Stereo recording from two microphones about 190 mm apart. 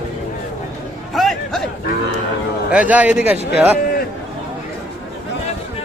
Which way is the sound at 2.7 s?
5° right (ahead or behind).